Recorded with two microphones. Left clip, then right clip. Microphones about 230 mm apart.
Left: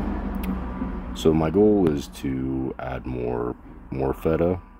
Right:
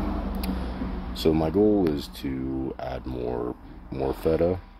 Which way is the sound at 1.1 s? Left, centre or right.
Centre.